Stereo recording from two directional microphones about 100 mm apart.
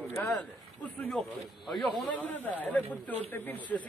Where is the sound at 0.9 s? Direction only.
15° left (ahead or behind).